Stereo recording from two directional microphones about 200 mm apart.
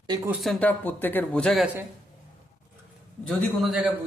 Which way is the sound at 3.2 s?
Centre (ahead or behind).